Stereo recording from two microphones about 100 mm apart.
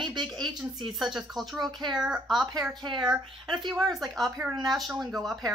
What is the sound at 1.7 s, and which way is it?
Speech, 45° right (ahead or behind).